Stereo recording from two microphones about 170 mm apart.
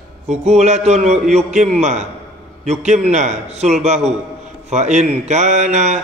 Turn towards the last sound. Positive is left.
turn(degrees=-40)  # may be behind; listen again after turning